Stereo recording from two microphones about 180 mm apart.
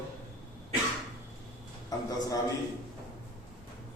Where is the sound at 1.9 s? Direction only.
20° left (ahead or behind).